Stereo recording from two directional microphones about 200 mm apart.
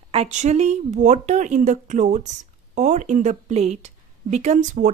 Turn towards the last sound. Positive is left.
turn(degrees=-40)  # may be behind; listen again after turning